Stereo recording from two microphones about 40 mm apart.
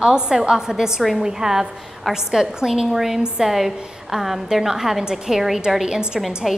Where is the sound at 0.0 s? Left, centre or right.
Centre.